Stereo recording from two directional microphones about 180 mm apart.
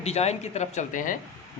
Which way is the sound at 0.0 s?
35° left (ahead or behind).